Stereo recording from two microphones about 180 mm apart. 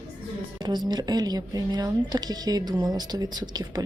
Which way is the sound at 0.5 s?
25° right (ahead or behind).